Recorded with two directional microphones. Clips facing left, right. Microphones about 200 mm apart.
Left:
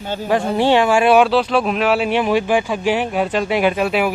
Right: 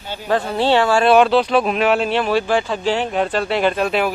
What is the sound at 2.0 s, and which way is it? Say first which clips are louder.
Speech: left 1 dB; 15° left (ahead or behind).